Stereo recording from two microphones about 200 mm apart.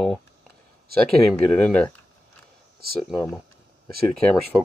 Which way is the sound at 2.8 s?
50° right (ahead or behind).